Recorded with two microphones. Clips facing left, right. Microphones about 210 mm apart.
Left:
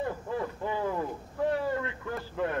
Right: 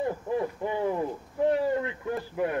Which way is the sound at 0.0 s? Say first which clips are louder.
Right 4 dB; 20° right (ahead or behind).